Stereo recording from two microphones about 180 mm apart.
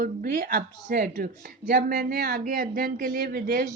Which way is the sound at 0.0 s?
55° right (ahead or behind).